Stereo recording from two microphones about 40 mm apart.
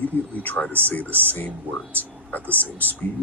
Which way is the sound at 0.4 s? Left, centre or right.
Left.